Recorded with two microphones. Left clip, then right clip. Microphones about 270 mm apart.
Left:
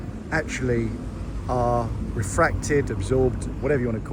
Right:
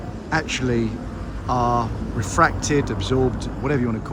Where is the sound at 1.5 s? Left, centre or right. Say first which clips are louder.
Right 3 dB; right.